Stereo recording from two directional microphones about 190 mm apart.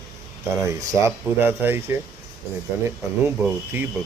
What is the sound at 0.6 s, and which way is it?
Speech, 15° right (ahead or behind).